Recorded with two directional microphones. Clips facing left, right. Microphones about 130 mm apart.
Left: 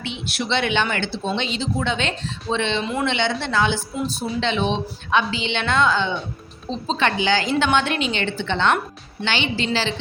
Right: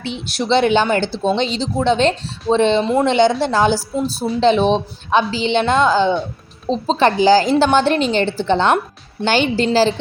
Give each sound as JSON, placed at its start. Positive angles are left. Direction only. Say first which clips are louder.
{"t": 0.3, "sound": "a woman's voice", "louder": "right 8 dB", "side_deg": -35}